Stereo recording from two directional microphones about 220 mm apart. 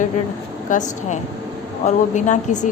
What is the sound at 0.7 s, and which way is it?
A woman's voice, 35° left (ahead or behind).